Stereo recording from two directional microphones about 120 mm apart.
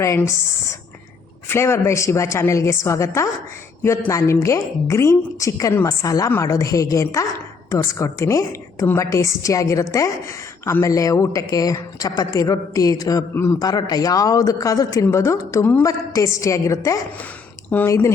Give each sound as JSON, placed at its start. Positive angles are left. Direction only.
{"t": 0.2, "sound": "a man's voice", "side_deg": 25}